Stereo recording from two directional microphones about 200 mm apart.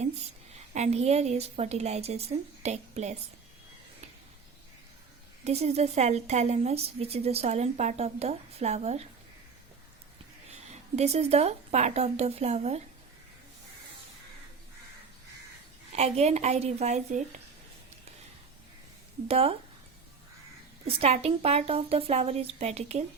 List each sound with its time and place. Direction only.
0.7 s a woman's voice: 35° right (ahead or behind)
5.5 s a woman's voice: 30° right (ahead or behind)
10.7 s a woman's voice: 30° right (ahead or behind)
16.0 s a woman's voice: 30° right (ahead or behind)
19.3 s speech: 30° right (ahead or behind)
20.8 s a woman's voice: 30° right (ahead or behind)